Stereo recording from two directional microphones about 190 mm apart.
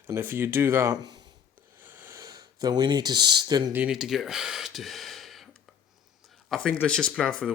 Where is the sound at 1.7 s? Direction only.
10° right (ahead or behind).